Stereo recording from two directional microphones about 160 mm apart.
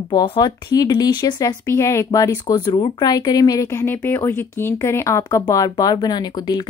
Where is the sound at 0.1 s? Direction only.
30° left (ahead or behind).